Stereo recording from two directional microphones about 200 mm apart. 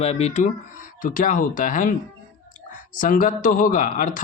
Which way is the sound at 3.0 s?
40° left (ahead or behind).